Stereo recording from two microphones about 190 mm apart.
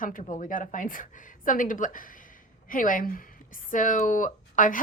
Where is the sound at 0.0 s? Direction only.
45° left (ahead or behind).